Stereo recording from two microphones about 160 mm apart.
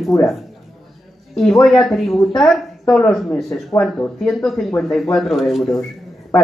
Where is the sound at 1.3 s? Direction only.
5° left (ahead or behind).